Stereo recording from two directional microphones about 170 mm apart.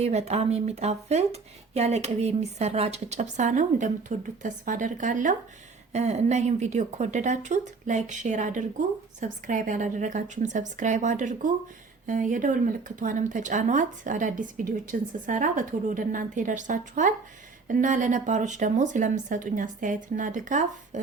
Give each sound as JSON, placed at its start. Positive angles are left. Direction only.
{"t": 0.0, "sound": "a woman's voice", "side_deg": -40}